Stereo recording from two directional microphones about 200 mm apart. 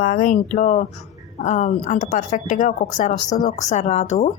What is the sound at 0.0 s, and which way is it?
A woman's voice, 45° left (ahead or behind).